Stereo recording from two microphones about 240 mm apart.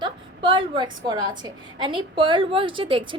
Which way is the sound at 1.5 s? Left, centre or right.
Centre.